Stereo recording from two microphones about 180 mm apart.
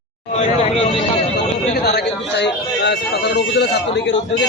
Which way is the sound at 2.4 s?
70° left (ahead or behind).